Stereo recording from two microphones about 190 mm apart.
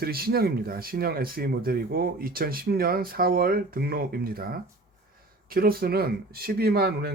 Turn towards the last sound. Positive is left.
turn(degrees=-55)  # may be behind; listen again after turning